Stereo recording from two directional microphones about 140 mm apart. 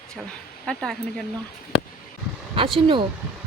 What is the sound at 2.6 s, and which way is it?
Speech, 40° right (ahead or behind).